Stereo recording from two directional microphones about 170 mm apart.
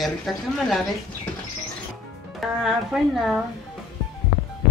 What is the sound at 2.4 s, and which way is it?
A woman's voice, centre (ahead or behind).